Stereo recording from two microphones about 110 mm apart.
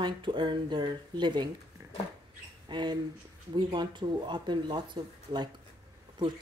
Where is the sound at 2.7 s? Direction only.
45° right (ahead or behind).